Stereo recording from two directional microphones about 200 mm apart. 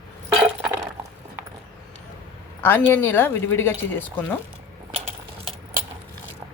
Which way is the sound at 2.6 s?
10° left (ahead or behind).